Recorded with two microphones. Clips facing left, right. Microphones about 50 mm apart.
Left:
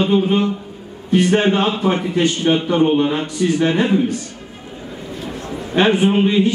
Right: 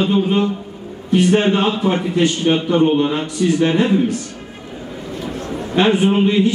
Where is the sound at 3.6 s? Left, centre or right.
Centre.